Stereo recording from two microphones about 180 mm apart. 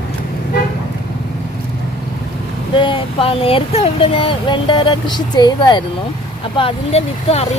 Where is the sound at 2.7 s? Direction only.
30° left (ahead or behind).